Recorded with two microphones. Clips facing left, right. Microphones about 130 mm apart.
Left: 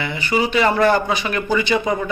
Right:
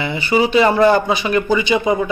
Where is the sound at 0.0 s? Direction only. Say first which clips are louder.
Right 4 dB; 25° right (ahead or behind).